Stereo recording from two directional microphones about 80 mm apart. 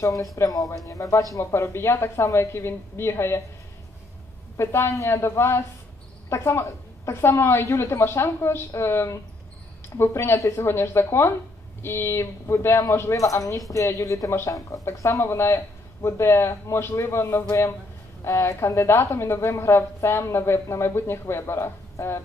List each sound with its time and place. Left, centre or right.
0.4 s speech: left
4.6 s speech: left
17.5 s speech: left